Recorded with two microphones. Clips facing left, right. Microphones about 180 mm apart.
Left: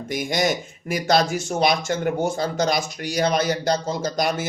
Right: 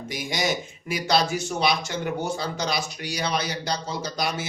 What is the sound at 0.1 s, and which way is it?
Speech, 50° left (ahead or behind).